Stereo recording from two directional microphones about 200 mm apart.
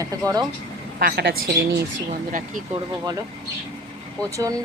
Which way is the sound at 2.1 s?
40° right (ahead or behind).